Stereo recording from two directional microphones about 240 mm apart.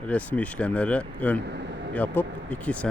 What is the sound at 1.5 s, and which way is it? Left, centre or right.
Speech, right.